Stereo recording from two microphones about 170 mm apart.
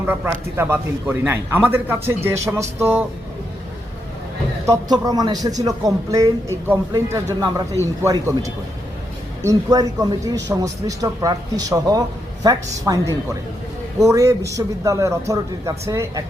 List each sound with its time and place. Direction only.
0.0 s a man's voice: 10° right (ahead or behind)
4.6 s speech: 20° right (ahead or behind)
14.0 s speech: 20° right (ahead or behind)